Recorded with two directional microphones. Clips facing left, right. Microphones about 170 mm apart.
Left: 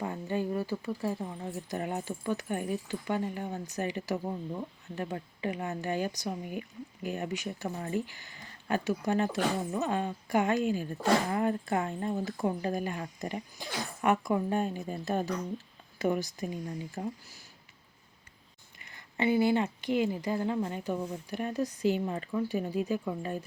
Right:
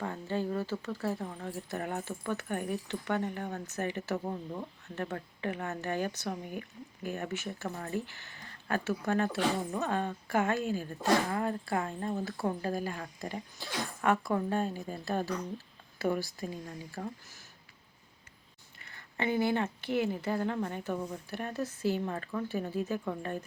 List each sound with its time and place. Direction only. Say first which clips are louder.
0.0 s speech: left 1 dB; 15° left (ahead or behind)
10.6 s speech: left 3 dB; 40° right (ahead or behind)
11.3 s speech: left 3 dB; 20° left (ahead or behind)
18.8 s speech: left 4 dB; 15° left (ahead or behind)